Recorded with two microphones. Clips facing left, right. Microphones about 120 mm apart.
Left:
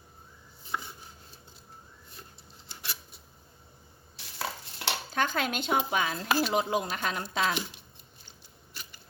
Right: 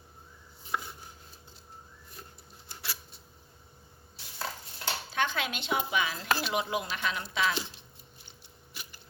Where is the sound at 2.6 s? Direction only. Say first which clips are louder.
Even; 25° left (ahead or behind).